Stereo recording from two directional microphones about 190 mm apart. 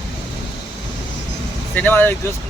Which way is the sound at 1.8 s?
10° left (ahead or behind).